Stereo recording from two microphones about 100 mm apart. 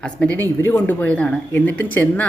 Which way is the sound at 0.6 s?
20° left (ahead or behind).